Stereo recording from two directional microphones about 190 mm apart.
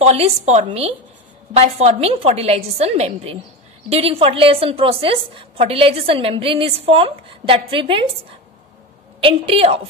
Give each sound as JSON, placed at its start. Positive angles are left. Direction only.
{"t": 0.0, "sound": "a woman's voice", "side_deg": -35}
{"t": 9.2, "sound": "a woman's voice", "side_deg": -30}